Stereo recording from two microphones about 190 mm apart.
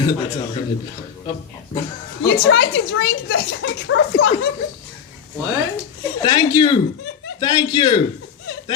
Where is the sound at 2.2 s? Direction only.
60° left (ahead or behind); by 4.3 s 80° left.